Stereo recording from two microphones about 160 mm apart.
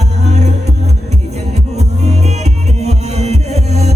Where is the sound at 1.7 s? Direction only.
45° right (ahead or behind).